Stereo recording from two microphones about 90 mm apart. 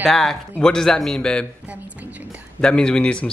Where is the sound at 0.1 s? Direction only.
5° left (ahead or behind).